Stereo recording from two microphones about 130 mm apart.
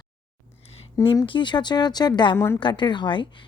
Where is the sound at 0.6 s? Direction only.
50° left (ahead or behind).